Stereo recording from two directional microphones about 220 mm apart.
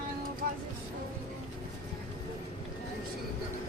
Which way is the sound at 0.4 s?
40° right (ahead or behind).